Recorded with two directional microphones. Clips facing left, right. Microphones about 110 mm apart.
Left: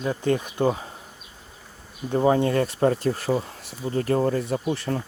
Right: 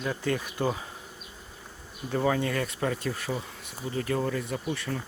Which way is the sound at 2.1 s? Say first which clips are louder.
Left 7 dB; 30° left (ahead or behind).